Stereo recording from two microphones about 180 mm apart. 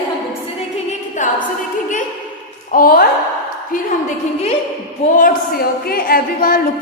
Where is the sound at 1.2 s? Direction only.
45° left (ahead or behind).